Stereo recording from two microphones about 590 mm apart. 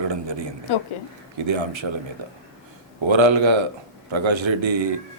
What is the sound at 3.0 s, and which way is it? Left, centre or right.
Speech, right.